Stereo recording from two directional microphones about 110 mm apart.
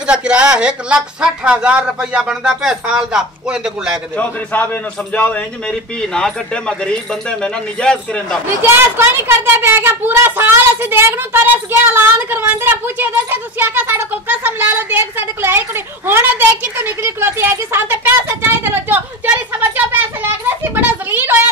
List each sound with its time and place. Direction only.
0.0 s a woman's voice: 10° right (ahead or behind)
4.2 s a man's voice: 15° left (ahead or behind)
8.6 s a woman's voice: 20° right (ahead or behind)